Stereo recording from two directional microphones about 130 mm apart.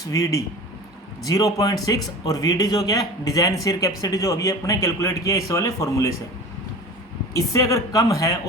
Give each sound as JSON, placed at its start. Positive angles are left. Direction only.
{"t": 0.1, "sound": "speech", "side_deg": 25}
{"t": 7.3, "sound": "speech", "side_deg": 25}